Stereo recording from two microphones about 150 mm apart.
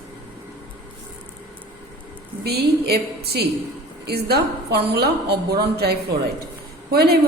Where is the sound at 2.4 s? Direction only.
90° right.